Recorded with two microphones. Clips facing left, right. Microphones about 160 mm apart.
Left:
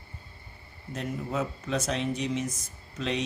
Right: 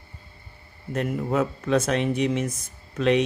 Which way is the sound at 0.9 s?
60° right (ahead or behind).